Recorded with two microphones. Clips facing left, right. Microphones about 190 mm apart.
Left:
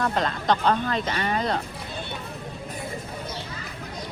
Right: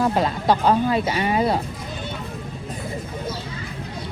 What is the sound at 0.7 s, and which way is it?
Speech, 10° right (ahead or behind).